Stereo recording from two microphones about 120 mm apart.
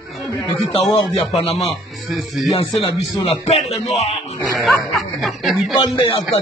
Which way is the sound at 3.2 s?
60° left (ahead or behind).